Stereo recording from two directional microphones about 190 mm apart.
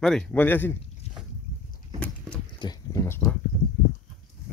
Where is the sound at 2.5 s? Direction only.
20° left (ahead or behind).